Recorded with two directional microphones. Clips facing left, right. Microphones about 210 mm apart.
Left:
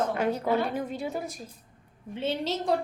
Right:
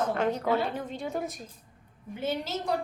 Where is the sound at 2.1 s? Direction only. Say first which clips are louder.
Left 1 dB; 30° left (ahead or behind).